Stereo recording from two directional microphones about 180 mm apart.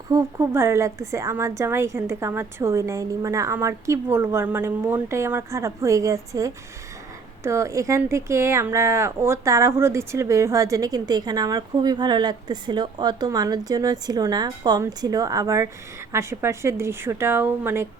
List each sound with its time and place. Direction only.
0.1 s a woman's voice: 15° right (ahead or behind)